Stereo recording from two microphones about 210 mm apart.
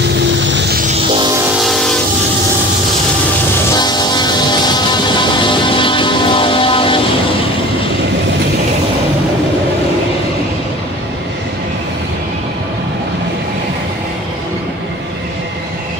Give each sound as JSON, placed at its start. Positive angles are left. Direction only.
{"t": 0.5, "sound": "music", "side_deg": -55}
{"t": 3.7, "sound": "train", "side_deg": 20}
{"t": 5.3, "sound": "music", "side_deg": 25}